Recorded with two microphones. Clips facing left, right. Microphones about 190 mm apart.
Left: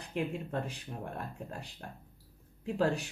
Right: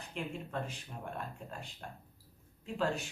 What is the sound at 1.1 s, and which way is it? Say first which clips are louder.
Speech: left 2 dB; 35° left (ahead or behind).